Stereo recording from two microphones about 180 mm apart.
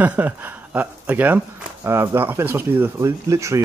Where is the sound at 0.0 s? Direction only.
10° right (ahead or behind).